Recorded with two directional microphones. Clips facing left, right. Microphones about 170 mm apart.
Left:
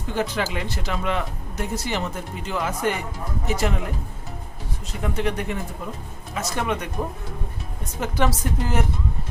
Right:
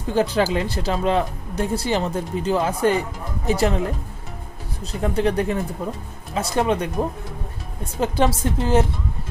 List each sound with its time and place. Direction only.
0.1 s speech: 35° right (ahead or behind)
5.0 s speech: 35° right (ahead or behind)
8.0 s a woman's voice: 30° right (ahead or behind)